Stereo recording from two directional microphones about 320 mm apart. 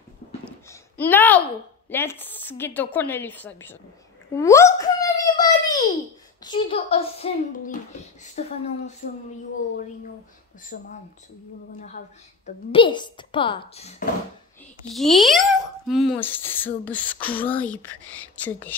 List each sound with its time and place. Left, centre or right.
0.7 s a sound: centre
1.9 s a child's voice: centre
10.7 s a child's voice: left
12.4 s speech: centre
14.9 s a child's voice: centre